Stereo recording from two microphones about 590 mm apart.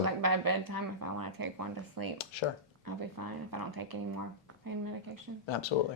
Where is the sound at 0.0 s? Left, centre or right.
Right.